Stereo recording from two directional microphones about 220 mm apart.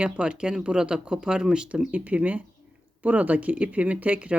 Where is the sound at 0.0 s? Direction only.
5° right (ahead or behind).